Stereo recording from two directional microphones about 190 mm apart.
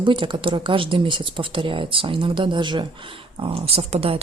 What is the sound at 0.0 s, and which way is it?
Speech, 25° right (ahead or behind).